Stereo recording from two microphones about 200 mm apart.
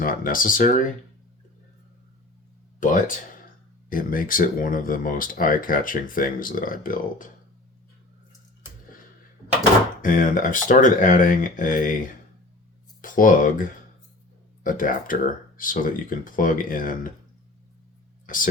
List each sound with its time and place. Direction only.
0.0 s speech: 45° left (ahead or behind)
3.8 s speech: 45° left (ahead or behind)
10.0 s speech: 40° left (ahead or behind)